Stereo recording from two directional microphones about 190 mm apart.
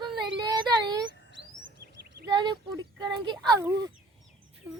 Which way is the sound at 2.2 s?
20° right (ahead or behind).